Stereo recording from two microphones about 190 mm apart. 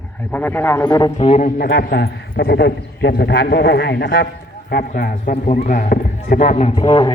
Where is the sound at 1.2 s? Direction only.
40° left (ahead or behind).